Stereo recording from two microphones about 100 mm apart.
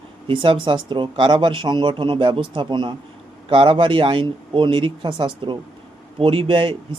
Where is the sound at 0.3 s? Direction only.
55° right (ahead or behind).